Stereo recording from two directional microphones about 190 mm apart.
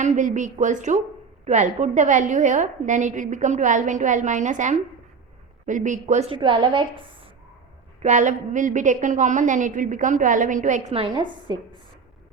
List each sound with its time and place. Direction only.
0.0 s a woman's voice: 40° right (ahead or behind)
8.0 s a woman's voice: 40° right (ahead or behind)